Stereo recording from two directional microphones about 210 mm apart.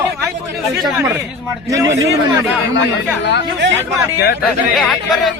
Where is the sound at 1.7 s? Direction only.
15° right (ahead or behind).